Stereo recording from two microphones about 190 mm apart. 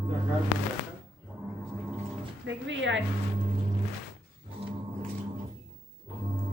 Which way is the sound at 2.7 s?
75° right (ahead or behind).